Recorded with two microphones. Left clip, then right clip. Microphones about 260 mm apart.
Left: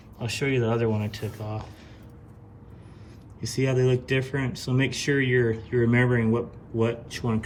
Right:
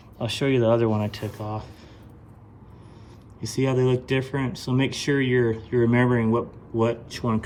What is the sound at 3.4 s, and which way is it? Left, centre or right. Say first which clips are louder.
Speech: right 2 dB; centre.